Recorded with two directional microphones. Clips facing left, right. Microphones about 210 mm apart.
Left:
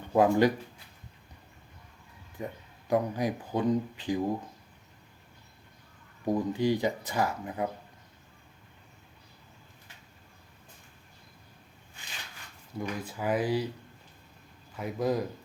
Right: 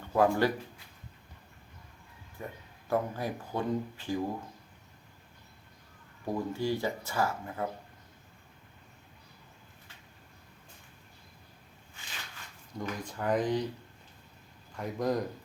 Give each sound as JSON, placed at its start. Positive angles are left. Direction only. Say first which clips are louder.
{"t": 0.1, "sound": "speech", "louder": "left 3 dB", "side_deg": 15}
{"t": 2.4, "sound": "speech", "louder": "left 4 dB", "side_deg": 15}
{"t": 6.2, "sound": "speech", "louder": "left 5 dB", "side_deg": 15}
{"t": 12.7, "sound": "speech", "louder": "left 2 dB", "side_deg": 5}
{"t": 14.8, "sound": "a man's voice", "louder": "left 1 dB", "side_deg": 0}